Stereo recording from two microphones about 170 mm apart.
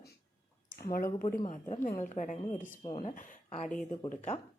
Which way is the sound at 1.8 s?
45° left (ahead or behind).